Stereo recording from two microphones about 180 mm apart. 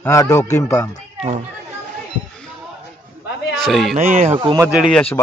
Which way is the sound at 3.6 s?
Centre (ahead or behind).